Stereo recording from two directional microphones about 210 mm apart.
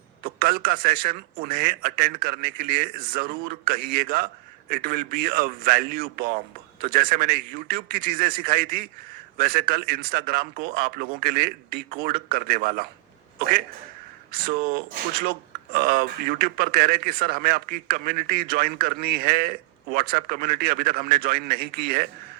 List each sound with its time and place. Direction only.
0.2 s speech: 45° right (ahead or behind)
14.4 s speech: 40° right (ahead or behind)